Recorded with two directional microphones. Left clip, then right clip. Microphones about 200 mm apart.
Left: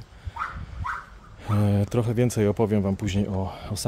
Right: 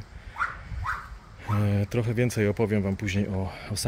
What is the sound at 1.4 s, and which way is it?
Speech, 20° left (ahead or behind).